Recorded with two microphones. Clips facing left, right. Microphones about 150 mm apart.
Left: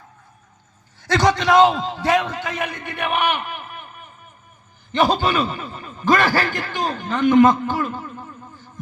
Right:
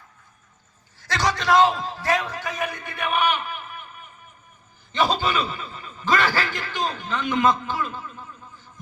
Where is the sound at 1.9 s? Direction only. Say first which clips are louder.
Left 5 dB; 75° left (ahead or behind).